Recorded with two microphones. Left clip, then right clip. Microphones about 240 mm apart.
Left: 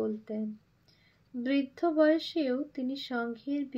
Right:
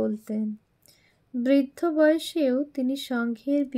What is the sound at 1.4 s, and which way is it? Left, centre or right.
Speech, right.